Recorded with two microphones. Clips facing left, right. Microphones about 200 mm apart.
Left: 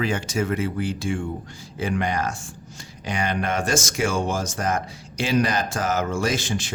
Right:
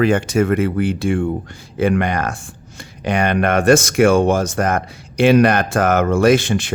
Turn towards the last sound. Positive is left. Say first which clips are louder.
# right 11 dB
turn(degrees=-60)  # may be behind; listen again after turning